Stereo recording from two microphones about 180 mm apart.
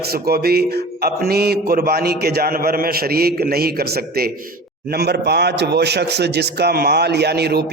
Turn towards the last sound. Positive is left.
turn(degrees=-65)  # may be behind; listen again after turning